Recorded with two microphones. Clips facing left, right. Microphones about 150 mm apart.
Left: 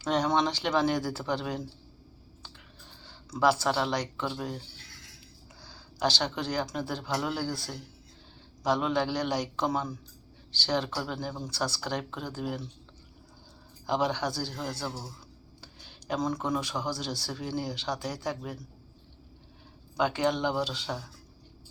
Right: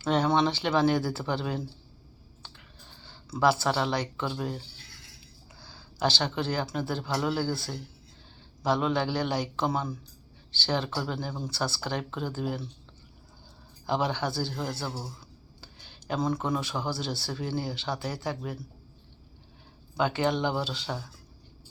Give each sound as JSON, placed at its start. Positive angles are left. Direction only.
{"t": 0.0, "sound": "speech", "side_deg": -5}
{"t": 3.0, "sound": "speech", "side_deg": -5}
{"t": 5.6, "sound": "speech", "side_deg": -5}
{"t": 13.8, "sound": "speech", "side_deg": -5}
{"t": 20.0, "sound": "speech", "side_deg": 0}